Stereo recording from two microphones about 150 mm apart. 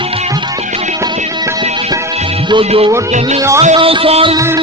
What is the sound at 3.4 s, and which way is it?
Speech, 20° right (ahead or behind).